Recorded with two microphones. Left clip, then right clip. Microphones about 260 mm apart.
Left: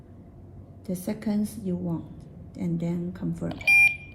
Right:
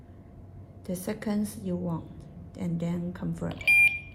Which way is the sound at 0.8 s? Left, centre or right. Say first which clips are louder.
Left 1 dB; right.